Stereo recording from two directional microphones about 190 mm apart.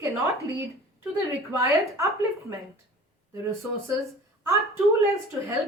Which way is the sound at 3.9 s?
15° right (ahead or behind).